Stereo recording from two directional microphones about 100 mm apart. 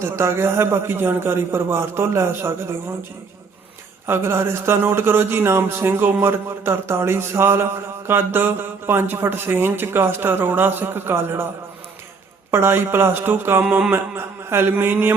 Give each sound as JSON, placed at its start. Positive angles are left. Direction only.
{"t": 0.0, "sound": "speech", "side_deg": -25}
{"t": 4.0, "sound": "speech", "side_deg": -25}
{"t": 12.5, "sound": "speech", "side_deg": -25}